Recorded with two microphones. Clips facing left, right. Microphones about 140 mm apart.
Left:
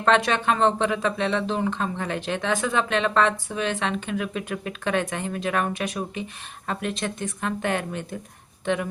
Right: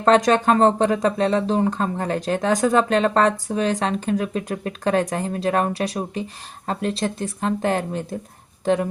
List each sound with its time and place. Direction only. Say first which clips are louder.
0.0 s speech: right 5 dB; 40° right (ahead or behind)